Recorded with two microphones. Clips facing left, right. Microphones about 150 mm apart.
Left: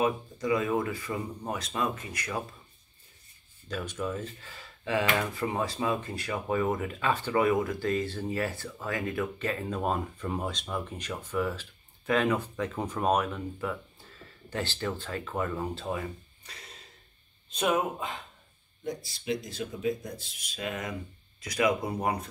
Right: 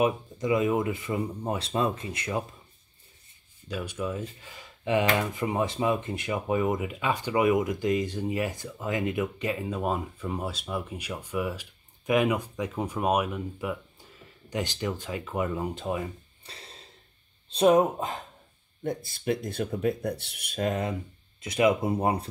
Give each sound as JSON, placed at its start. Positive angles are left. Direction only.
{"t": 0.0, "sound": "speech", "side_deg": -20}
{"t": 3.6, "sound": "speech", "side_deg": -10}
{"t": 16.4, "sound": "a sound", "side_deg": -30}
{"t": 17.5, "sound": "speech", "side_deg": -30}
{"t": 18.9, "sound": "speech", "side_deg": -55}
{"t": 20.6, "sound": "speech", "side_deg": -35}